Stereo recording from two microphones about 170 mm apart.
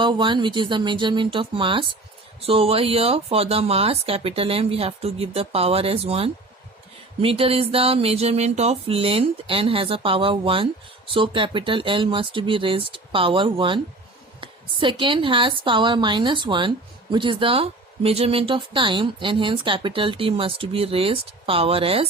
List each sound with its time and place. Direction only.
0.0 s speech: 30° right (ahead or behind)